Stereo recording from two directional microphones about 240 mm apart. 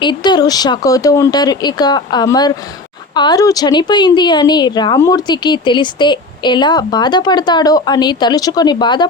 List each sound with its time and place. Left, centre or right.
0.0 s speech: centre